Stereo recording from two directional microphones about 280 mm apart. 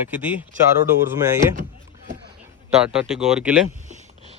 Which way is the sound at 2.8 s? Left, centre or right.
Centre.